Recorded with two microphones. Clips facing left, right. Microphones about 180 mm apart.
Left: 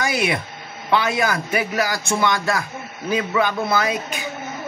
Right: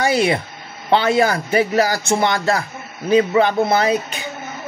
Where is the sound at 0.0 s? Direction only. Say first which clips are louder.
Right 5 dB; 30° right (ahead or behind).